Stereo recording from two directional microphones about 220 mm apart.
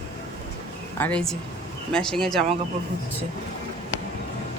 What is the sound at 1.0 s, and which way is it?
Speech, 5° left (ahead or behind).